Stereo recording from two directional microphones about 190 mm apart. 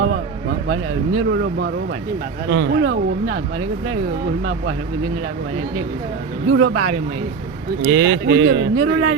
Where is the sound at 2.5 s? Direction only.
75° right (ahead or behind).